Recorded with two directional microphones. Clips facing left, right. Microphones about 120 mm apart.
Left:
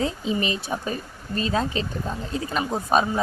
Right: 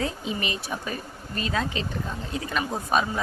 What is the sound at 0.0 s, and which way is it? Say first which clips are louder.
Speech: left 4 dB; 30° left (ahead or behind).